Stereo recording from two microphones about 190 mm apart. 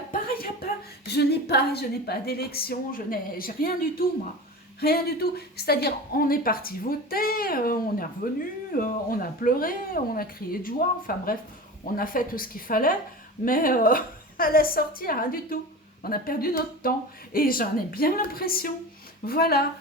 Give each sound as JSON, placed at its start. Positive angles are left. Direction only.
{"t": 0.1, "sound": "a woman's voice", "side_deg": 50}